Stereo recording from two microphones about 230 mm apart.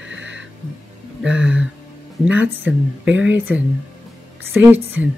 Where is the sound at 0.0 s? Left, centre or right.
Right.